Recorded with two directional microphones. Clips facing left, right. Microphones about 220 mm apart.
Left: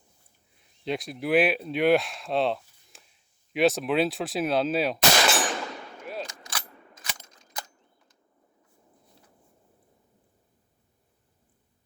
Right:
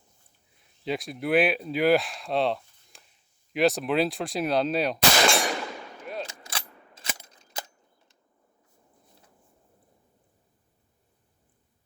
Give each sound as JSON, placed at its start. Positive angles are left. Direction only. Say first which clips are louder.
{"t": 0.9, "sound": "speech", "louder": "even", "side_deg": 0}
{"t": 6.5, "sound": "a sound", "louder": "even", "side_deg": -30}
{"t": 7.3, "sound": "cap gun", "louder": "right 1 dB", "side_deg": -30}